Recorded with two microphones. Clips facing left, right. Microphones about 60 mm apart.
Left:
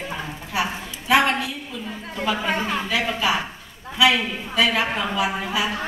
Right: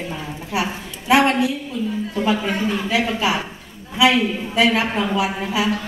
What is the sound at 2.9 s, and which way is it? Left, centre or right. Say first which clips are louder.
Speech: right 2 dB; centre.